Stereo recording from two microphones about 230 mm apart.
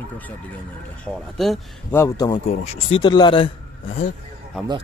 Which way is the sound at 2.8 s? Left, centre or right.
Left.